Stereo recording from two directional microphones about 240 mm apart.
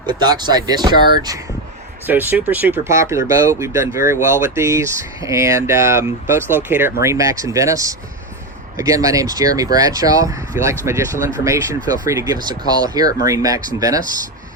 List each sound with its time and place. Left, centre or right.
0.0 s speech: centre